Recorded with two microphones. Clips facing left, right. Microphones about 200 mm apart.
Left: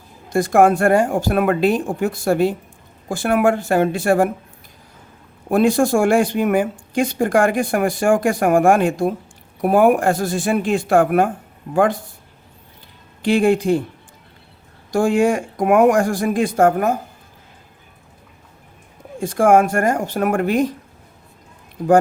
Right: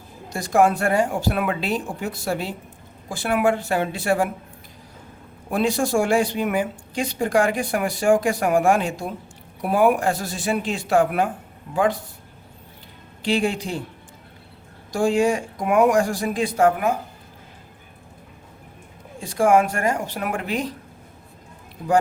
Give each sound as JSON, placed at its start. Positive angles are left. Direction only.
{"t": 0.3, "sound": "a woman's voice", "side_deg": 55}
{"t": 5.5, "sound": "a woman's voice", "side_deg": 50}
{"t": 13.2, "sound": "a woman's voice", "side_deg": 55}
{"t": 14.9, "sound": "a woman's voice", "side_deg": 55}
{"t": 19.2, "sound": "a woman's voice", "side_deg": 50}
{"t": 21.8, "sound": "a woman's voice", "side_deg": 45}